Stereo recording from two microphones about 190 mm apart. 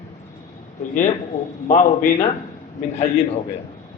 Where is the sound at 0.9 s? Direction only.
40° left (ahead or behind).